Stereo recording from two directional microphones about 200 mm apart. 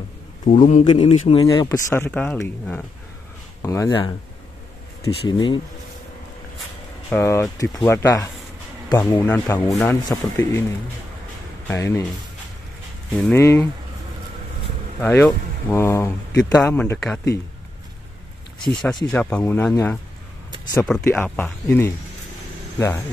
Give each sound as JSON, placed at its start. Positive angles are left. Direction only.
{"t": 0.5, "sound": "speech", "side_deg": 40}
{"t": 0.8, "sound": "speech", "side_deg": 30}
{"t": 1.4, "sound": "speech", "side_deg": 20}
{"t": 2.0, "sound": "speech", "side_deg": 5}
{"t": 7.1, "sound": "speech", "side_deg": 15}
{"t": 11.6, "sound": "speech", "side_deg": 15}
{"t": 13.1, "sound": "speech", "side_deg": 10}
{"t": 15.0, "sound": "speech", "side_deg": 10}
{"t": 18.7, "sound": "speech", "side_deg": 5}